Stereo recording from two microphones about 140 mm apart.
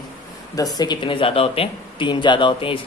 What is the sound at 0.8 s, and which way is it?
Speech, 35° left (ahead or behind).